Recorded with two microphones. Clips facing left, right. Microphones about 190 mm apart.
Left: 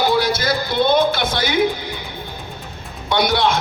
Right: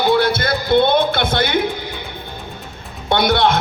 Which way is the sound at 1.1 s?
55° right (ahead or behind).